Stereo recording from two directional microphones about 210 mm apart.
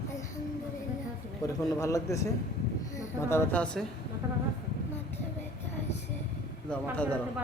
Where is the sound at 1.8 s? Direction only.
15° left (ahead or behind).